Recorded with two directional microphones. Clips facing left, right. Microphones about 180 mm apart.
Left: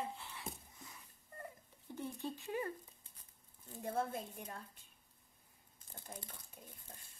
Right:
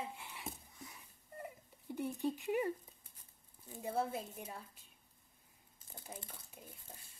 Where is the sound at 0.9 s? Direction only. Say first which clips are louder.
Right 3 dB; 10° right (ahead or behind).